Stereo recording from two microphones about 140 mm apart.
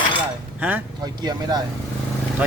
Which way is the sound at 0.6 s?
10° right (ahead or behind).